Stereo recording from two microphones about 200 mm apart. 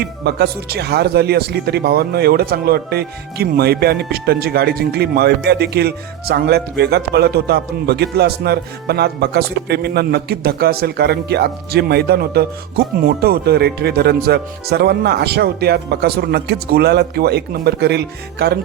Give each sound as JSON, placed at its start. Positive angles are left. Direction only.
{"t": 0.0, "sound": "speech", "side_deg": -55}